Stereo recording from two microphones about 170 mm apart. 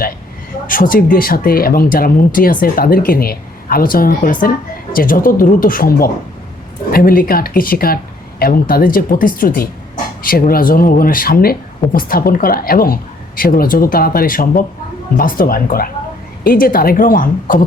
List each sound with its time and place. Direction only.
0.7 s speech: 55° left (ahead or behind)